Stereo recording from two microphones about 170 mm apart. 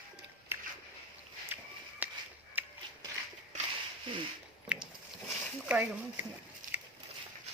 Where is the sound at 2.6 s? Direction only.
10° right (ahead or behind).